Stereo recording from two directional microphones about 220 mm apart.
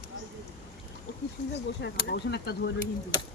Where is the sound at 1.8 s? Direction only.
50° left (ahead or behind).